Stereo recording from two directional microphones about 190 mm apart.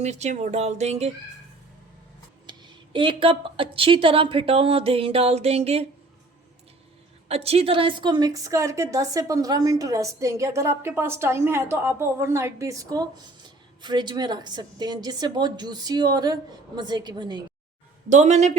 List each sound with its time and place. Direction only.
0.0 s speech: 35° right (ahead or behind)
2.5 s a woman's voice: 25° right (ahead or behind)
7.3 s a woman's voice: 30° right (ahead or behind)
18.1 s speech: 40° right (ahead or behind)